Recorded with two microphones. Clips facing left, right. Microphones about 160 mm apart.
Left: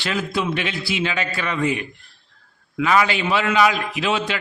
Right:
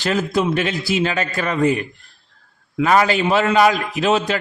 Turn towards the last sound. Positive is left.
turn(degrees=-40)  # may be behind; listen again after turning